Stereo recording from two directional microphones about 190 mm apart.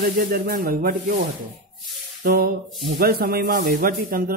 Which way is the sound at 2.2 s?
50° right (ahead or behind).